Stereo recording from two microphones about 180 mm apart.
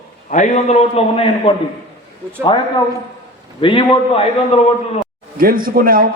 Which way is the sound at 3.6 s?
30° left (ahead or behind).